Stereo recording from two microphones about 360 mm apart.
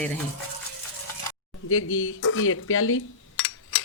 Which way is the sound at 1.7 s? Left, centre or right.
Left.